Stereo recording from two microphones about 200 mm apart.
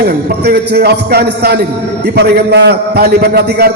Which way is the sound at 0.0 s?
55° right (ahead or behind).